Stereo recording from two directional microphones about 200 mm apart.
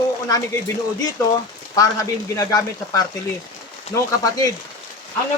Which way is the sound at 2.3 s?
15° left (ahead or behind).